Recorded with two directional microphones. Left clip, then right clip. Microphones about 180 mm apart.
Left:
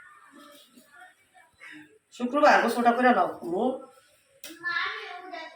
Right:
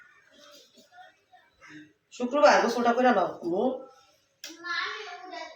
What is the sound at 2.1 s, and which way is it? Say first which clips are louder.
Speech: even; 30° right (ahead or behind).